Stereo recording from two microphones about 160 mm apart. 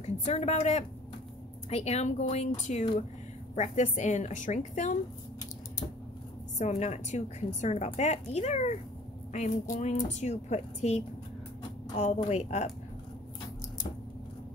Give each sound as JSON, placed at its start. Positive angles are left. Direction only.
{"t": 0.0, "sound": "a woman's voice", "side_deg": 40}
{"t": 6.6, "sound": "a woman's voice", "side_deg": 45}